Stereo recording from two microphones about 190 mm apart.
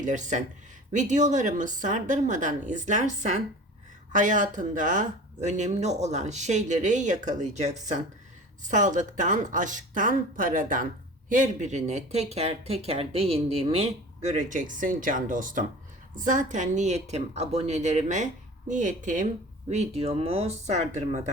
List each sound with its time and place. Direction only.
0.0 s speech: 40° right (ahead or behind)
14.3 s speech: 40° right (ahead or behind)